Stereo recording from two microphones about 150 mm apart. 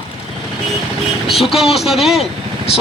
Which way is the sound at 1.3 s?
Centre (ahead or behind).